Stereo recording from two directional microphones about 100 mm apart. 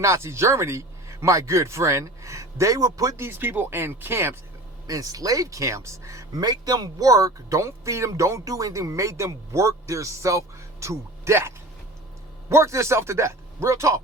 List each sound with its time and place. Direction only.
0.0 s speech: 30° right (ahead or behind)
4.9 s speech: 35° right (ahead or behind)
6.4 s speech: 45° right (ahead or behind)